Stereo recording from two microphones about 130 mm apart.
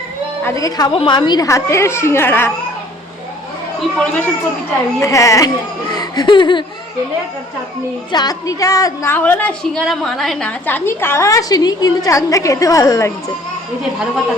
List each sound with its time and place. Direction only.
0.4 s a woman's voice: 25° left (ahead or behind)
0.9 s a woman's voice: 40° left (ahead or behind); by 2.5 s 15° left (ahead or behind)
3.8 s speech: 5° left (ahead or behind)
4.9 s a woman's voice: 25° left (ahead or behind)
8.1 s a woman's voice: 30° left (ahead or behind); by 10.5 s centre (ahead or behind)
10.7 s a woman's voice: 15° left (ahead or behind)